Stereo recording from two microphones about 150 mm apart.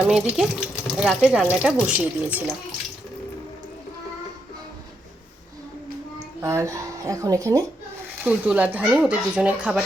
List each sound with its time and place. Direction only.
0.0 s speech: 5° right (ahead or behind)
6.4 s speech: 20° right (ahead or behind)
8.2 s speech: 10° right (ahead or behind)